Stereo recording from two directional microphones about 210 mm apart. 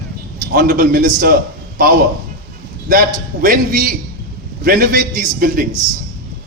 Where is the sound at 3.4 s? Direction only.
40° right (ahead or behind).